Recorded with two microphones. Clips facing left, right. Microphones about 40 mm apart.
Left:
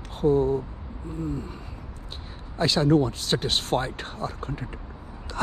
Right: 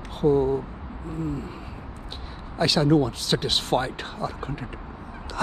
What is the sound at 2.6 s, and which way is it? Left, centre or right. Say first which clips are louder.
Speech: right 1 dB; right.